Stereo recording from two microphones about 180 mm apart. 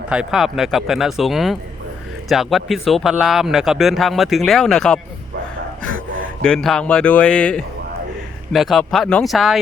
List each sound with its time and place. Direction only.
0.1 s a man's voice: 5° right (ahead or behind)